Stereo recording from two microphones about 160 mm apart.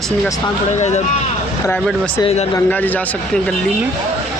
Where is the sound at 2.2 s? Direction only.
45° left (ahead or behind).